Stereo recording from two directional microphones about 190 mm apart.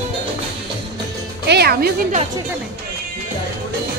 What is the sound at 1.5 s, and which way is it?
Speech, 55° right (ahead or behind).